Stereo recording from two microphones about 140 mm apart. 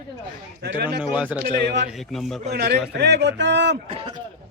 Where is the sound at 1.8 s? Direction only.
Centre (ahead or behind).